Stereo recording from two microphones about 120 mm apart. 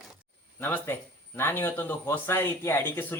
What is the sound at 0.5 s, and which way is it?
Speech, 15° left (ahead or behind).